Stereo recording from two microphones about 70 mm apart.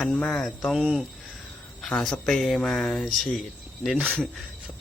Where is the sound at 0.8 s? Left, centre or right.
Centre.